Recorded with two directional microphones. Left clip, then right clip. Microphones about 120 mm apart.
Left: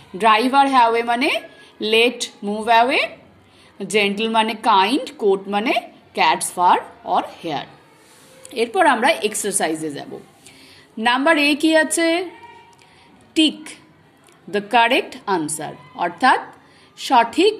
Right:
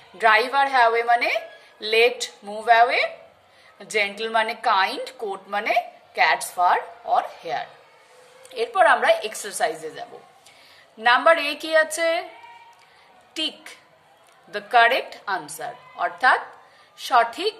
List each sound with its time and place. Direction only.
0.2 s a woman's voice: 15° left (ahead or behind)
13.3 s a woman's voice: 15° left (ahead or behind)